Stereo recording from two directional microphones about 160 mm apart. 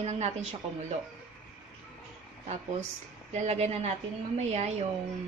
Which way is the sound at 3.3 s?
45° right (ahead or behind).